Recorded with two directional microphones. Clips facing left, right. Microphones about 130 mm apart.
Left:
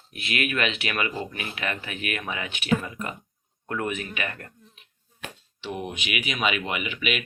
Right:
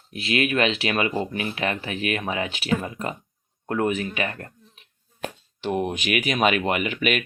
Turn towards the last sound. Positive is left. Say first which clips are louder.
# right 5 dB
turn(degrees=-45)  # may be behind; listen again after turning